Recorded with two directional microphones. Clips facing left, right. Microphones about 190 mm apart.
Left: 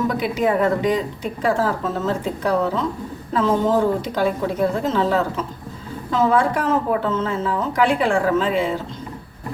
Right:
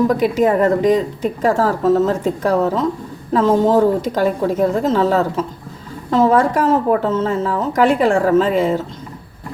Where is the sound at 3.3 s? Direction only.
40° right (ahead or behind).